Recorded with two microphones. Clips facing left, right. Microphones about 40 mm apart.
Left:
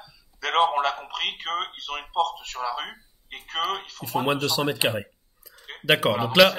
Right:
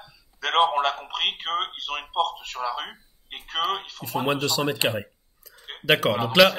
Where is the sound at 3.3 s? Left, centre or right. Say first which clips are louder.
Right 1 dB; right.